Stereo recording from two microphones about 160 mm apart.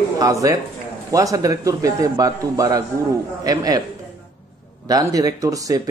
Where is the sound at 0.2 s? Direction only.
20° right (ahead or behind).